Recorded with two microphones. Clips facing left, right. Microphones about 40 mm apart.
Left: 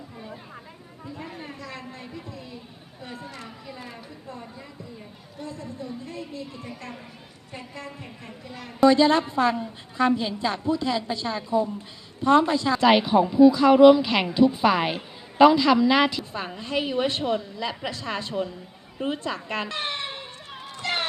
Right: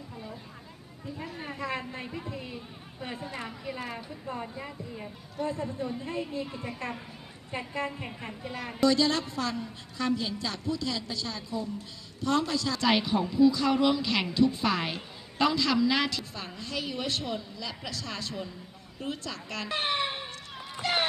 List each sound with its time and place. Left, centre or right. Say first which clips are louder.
1.5 s a woman's voice: right 4 dB; right
8.9 s a woman's voice: left 8 dB; left
19.7 s a sound: right 1 dB; centre
20.8 s music: even; centre